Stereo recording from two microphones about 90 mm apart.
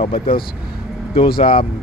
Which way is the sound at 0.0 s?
90° left.